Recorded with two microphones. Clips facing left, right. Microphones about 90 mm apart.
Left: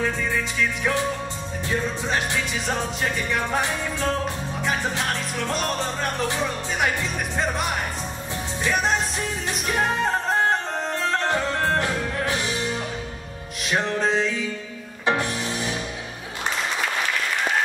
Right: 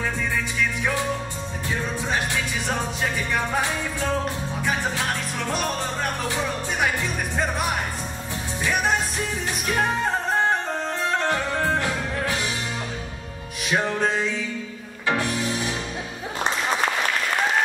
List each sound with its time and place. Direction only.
11.8 s music: 20° left (ahead or behind)
13.7 s music: 5° right (ahead or behind)
15.0 s music: 20° left (ahead or behind)